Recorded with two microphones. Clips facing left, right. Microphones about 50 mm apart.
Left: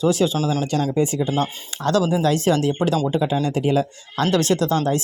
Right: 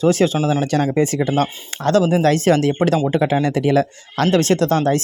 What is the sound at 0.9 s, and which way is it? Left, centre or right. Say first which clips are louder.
Speech: right 3 dB; right.